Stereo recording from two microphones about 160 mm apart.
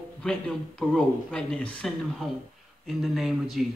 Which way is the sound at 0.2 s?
5° left (ahead or behind).